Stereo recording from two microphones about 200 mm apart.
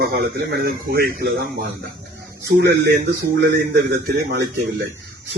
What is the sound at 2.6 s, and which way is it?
A man's voice, 55° right (ahead or behind).